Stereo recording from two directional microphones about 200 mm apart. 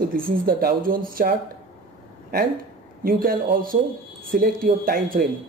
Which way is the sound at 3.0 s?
45° right (ahead or behind).